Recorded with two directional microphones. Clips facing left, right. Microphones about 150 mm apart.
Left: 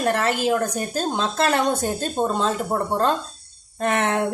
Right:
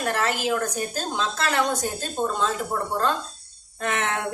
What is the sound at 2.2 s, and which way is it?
Speech, 30° left (ahead or behind).